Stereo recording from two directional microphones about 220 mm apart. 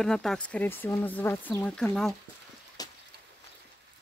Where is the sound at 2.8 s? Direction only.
15° left (ahead or behind).